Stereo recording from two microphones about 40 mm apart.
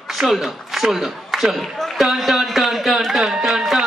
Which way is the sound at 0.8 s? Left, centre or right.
Centre.